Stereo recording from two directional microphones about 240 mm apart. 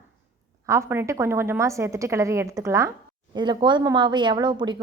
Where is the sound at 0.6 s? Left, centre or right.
Centre.